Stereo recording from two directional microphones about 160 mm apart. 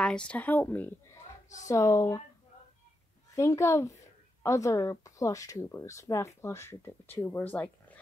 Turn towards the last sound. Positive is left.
turn(degrees=10)  # may be behind; listen again after turning